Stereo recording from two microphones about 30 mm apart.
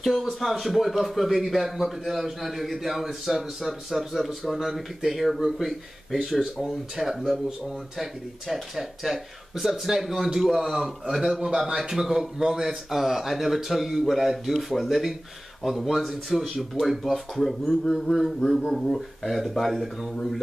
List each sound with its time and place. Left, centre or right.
0.2 s a man's voice: centre
6.4 s a man's voice: right
6.7 s a man's voice: centre
8.7 s a man's voice: centre
12.6 s a man's voice: centre